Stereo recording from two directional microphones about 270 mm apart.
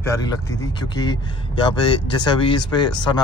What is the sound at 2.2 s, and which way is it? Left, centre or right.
Speech, centre.